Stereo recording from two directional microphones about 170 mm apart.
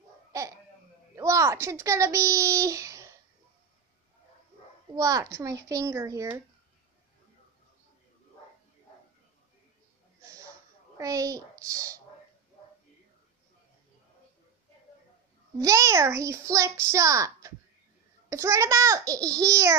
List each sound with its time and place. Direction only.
0.3 s babbling: 20° right (ahead or behind)
1.1 s a child's voice: 15° right (ahead or behind)
4.9 s a child's voice: 20° right (ahead or behind)
10.2 s a sound: 20° right (ahead or behind)
11.0 s a child's voice: 20° right (ahead or behind)
15.5 s a child's voice: 20° right (ahead or behind)